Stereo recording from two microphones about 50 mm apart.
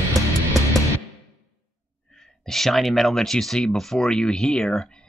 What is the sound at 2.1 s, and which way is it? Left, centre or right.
Speech, centre.